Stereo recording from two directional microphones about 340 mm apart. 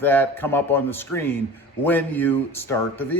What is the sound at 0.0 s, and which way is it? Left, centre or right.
A man's voice, centre.